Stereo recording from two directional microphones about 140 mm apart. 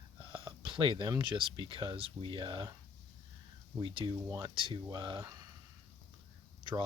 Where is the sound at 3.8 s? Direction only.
35° right (ahead or behind).